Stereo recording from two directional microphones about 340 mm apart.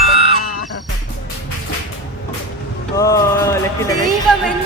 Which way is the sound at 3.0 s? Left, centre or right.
Centre.